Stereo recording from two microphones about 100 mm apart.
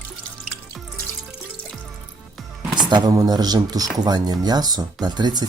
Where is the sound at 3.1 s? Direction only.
40° right (ahead or behind).